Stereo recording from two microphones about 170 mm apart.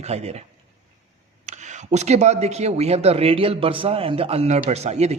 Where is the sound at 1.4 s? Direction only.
45° right (ahead or behind).